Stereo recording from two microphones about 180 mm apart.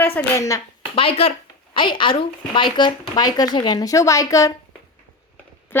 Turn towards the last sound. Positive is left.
turn(degrees=15)  # may be behind; listen again after turning